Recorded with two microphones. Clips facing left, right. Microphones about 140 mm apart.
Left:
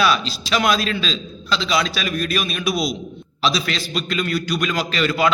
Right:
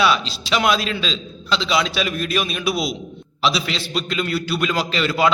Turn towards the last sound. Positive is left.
turn(degrees=-25)  # may be behind; listen again after turning